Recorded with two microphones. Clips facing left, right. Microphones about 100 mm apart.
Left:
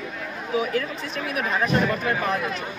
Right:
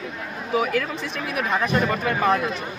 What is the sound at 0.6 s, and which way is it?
Speech, 80° right.